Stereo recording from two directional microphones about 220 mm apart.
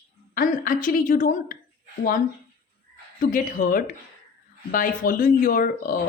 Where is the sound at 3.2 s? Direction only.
35° left (ahead or behind).